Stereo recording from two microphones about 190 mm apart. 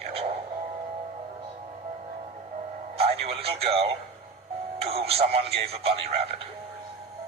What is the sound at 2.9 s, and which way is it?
Speech, 30° right (ahead or behind).